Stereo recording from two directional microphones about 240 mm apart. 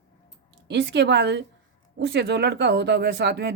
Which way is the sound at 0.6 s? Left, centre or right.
Right.